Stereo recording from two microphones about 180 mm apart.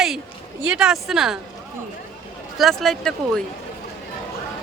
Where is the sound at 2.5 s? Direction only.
Centre (ahead or behind).